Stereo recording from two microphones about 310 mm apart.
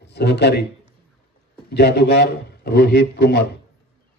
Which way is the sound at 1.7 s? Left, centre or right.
Left.